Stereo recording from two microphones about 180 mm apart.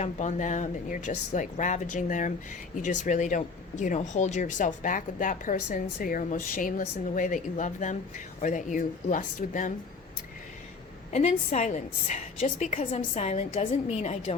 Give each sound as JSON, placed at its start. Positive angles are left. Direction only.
{"t": 0.0, "sound": "speech", "side_deg": 40}
{"t": 11.1, "sound": "a woman's voice", "side_deg": 40}